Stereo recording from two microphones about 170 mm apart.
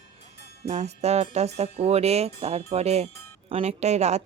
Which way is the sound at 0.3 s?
70° left (ahead or behind).